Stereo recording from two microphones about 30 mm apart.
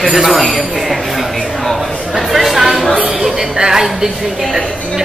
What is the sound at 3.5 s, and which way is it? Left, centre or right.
Speech, right.